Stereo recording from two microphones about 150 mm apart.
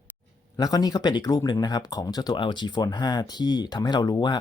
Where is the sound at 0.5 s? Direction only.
25° left (ahead or behind).